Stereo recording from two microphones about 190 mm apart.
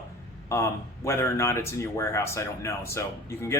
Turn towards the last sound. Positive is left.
turn(degrees=15)  # may be behind; listen again after turning